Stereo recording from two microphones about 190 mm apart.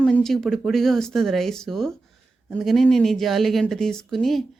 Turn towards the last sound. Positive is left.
turn(degrees=0)  # may be behind; listen again after turning